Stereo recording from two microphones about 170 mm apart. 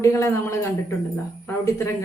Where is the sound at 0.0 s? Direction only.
20° left (ahead or behind).